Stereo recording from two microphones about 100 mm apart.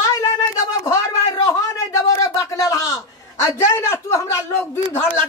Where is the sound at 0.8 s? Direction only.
35° left (ahead or behind).